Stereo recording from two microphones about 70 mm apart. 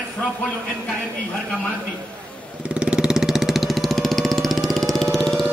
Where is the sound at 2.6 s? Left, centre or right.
Centre.